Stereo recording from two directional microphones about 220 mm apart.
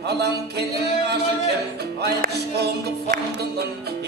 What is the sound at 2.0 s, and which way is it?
Music, 45° right (ahead or behind).